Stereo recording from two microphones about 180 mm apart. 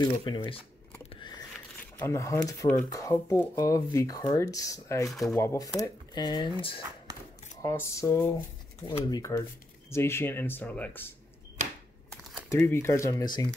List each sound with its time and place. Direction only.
0.0 s speech: 25° left (ahead or behind)
2.0 s speech: 15° left (ahead or behind)
5.1 s speech: centre (ahead or behind)
5.4 s speech: 15° left (ahead or behind)
7.6 s speech: 15° left (ahead or behind)
12.5 s speech: 10° left (ahead or behind)